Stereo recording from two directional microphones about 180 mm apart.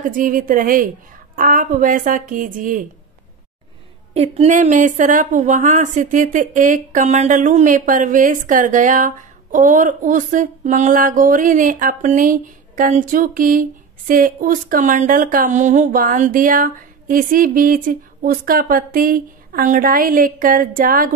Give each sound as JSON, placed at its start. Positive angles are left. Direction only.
{"t": 0.0, "sound": "a woman's voice", "side_deg": -50}
{"t": 4.1, "sound": "a woman's voice", "side_deg": -35}